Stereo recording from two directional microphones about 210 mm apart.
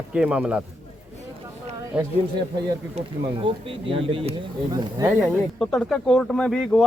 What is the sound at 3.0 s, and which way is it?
Speech, 30° right (ahead or behind).